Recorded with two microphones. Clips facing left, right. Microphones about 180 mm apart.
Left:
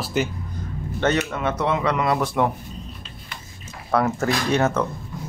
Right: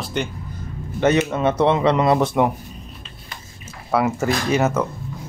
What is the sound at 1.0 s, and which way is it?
Speech, 10° right (ahead or behind).